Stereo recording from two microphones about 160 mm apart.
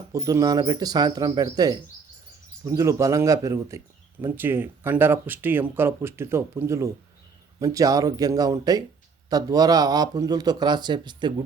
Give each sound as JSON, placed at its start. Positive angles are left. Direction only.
{"t": 0.1, "sound": "a man's voice", "side_deg": -20}